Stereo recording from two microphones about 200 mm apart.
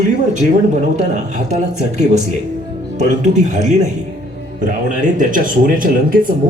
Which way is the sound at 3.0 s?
40° right (ahead or behind).